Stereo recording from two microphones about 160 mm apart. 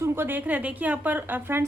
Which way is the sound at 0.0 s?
15° right (ahead or behind).